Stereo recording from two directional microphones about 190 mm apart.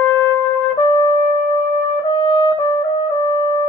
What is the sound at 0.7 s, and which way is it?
Music, 25° left (ahead or behind).